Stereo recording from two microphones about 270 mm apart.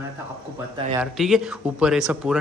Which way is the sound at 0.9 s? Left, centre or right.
Centre.